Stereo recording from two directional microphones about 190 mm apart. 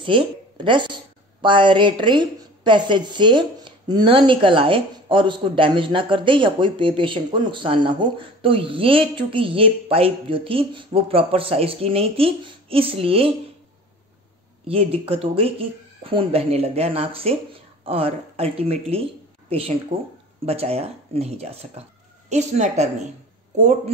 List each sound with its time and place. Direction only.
0.0 s a woman's voice: 25° right (ahead or behind)
14.7 s speech: 30° right (ahead or behind)